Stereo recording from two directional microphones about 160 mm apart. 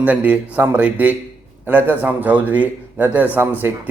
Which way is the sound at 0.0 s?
10° right (ahead or behind).